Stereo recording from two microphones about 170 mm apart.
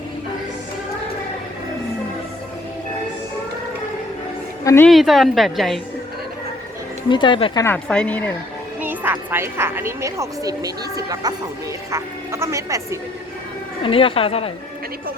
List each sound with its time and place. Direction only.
4.6 s a woman's voice: 15° left (ahead or behind)
4.9 s a woman's voice: centre (ahead or behind)
7.1 s speech: 30° left (ahead or behind)
7.6 s a woman's voice: 10° left (ahead or behind)
8.8 s a woman's voice: 10° right (ahead or behind)
13.8 s speech: 30° left (ahead or behind)